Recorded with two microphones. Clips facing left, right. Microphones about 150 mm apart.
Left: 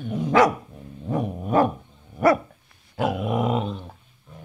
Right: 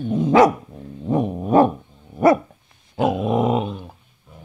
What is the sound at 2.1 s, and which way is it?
Dog, 20° right (ahead or behind).